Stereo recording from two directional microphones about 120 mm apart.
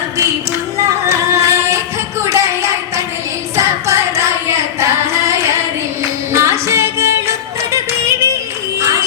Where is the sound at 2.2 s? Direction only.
25° right (ahead or behind).